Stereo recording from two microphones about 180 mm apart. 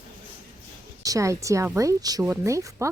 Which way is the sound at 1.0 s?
20° right (ahead or behind).